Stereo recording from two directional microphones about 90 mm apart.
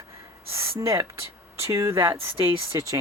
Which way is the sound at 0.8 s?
35° right (ahead or behind).